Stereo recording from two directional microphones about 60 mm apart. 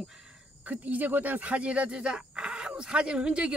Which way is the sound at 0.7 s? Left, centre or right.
Right.